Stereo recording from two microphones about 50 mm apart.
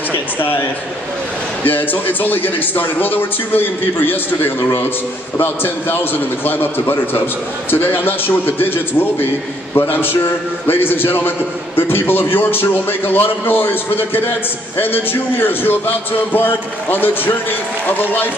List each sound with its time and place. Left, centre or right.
1.6 s a man's voice: left